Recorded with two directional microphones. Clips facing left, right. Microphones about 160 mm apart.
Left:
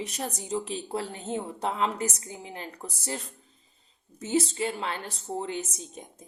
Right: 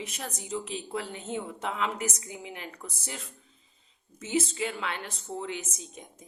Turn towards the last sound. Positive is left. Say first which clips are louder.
# left 3 dB
turn(degrees=35)  # may be behind; listen again after turning